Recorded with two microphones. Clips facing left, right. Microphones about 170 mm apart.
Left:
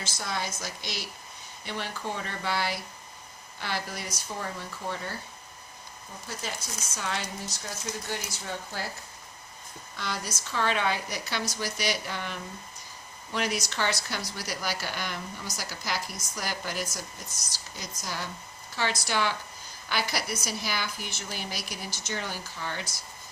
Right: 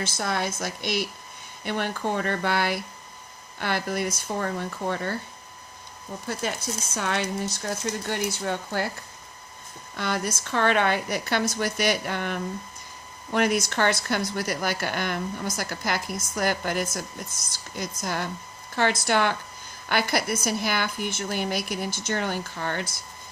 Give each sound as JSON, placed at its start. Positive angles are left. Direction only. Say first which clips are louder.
{"t": 0.0, "sound": "speech", "louder": "right 6 dB", "side_deg": -60}
{"t": 6.3, "sound": "speech", "louder": "right 8 dB", "side_deg": -60}
{"t": 10.0, "sound": "speech", "louder": "right 7 dB", "side_deg": -55}